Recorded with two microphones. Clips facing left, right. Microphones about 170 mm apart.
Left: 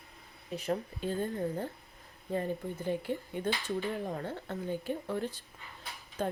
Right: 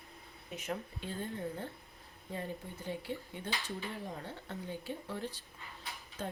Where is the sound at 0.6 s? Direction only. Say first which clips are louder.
Left 7 dB; 40° left (ahead or behind).